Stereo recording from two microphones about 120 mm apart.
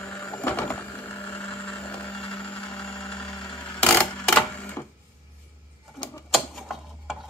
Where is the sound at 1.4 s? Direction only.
10° left (ahead or behind).